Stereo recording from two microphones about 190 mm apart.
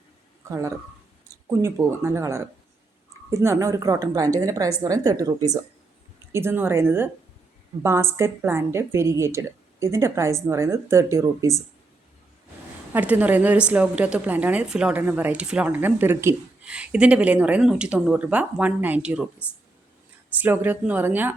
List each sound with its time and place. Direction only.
0.4 s a woman's voice: 15° right (ahead or behind)
12.9 s a woman's voice: 10° right (ahead or behind)
20.3 s a woman's voice: 10° right (ahead or behind)